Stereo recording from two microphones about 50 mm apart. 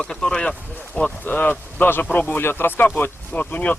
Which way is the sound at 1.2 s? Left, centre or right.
Left.